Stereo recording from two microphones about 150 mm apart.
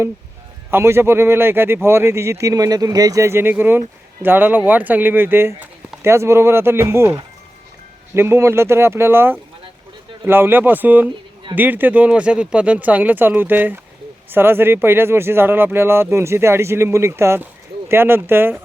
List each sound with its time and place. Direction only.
0.7 s speech: 15° right (ahead or behind)
8.1 s speech: 15° right (ahead or behind)